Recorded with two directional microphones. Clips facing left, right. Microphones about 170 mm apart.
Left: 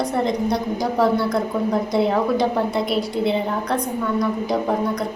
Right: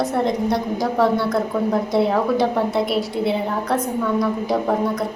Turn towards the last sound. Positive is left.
turn(degrees=0)  # may be behind; listen again after turning